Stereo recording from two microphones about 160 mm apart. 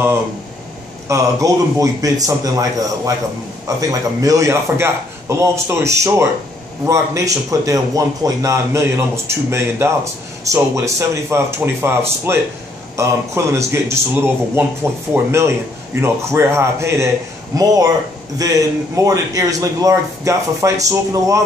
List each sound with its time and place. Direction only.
1.0 s a man's voice: 20° right (ahead or behind)